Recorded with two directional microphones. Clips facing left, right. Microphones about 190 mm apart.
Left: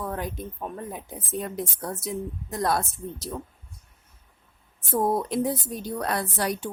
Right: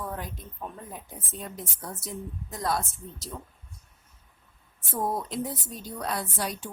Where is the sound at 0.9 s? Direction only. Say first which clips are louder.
Left 8 dB; 65° left (ahead or behind).